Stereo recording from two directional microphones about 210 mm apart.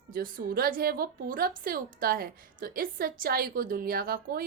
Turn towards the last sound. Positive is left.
turn(degrees=-45)  # may be behind; listen again after turning